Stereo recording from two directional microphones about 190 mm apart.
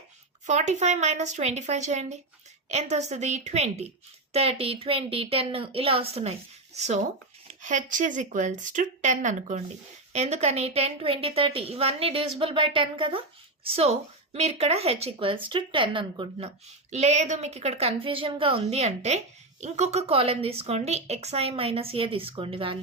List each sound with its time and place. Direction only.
0.4 s a woman's voice: 40° right (ahead or behind)
16.9 s a woman's voice: 35° right (ahead or behind)